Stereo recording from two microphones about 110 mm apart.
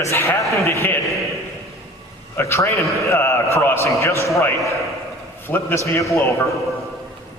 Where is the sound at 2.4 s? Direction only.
20° left (ahead or behind).